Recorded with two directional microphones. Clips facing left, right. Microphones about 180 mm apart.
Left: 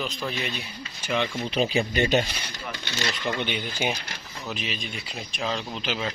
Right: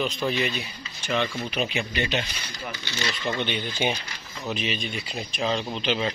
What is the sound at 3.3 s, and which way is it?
Speech, 10° left (ahead or behind).